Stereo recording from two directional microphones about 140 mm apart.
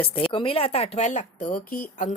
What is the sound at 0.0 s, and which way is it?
A woman's voice, 40° left (ahead or behind).